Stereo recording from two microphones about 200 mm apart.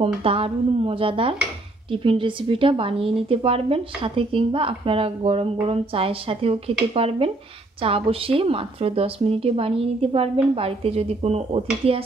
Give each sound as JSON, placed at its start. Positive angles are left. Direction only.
{"t": 0.0, "sound": "a woman's voice", "side_deg": -30}